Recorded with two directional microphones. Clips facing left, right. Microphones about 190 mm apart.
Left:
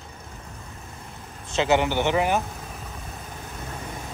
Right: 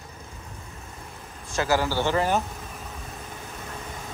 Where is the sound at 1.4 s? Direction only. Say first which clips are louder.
Left 3 dB; 20° left (ahead or behind).